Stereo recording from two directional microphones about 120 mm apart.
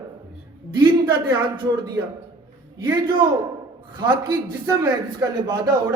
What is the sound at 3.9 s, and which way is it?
Speech, 30° right (ahead or behind).